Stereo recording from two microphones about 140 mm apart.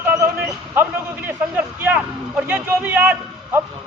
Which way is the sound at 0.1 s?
20° right (ahead or behind).